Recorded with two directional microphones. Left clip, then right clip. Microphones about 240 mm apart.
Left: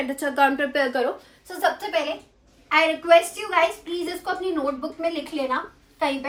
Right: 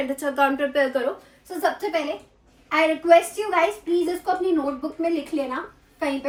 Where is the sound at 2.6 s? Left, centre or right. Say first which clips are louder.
Even; centre.